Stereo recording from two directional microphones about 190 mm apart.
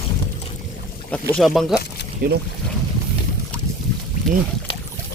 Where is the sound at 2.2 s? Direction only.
50° right (ahead or behind).